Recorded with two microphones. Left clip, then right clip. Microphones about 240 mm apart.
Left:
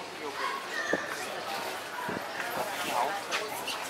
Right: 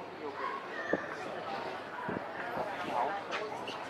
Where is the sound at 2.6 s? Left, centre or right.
Centre.